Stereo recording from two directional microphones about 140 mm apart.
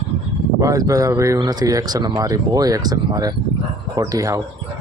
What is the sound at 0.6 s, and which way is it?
Speech, 25° right (ahead or behind).